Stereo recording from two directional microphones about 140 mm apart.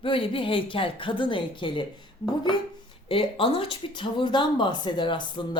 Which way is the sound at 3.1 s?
40° left (ahead or behind).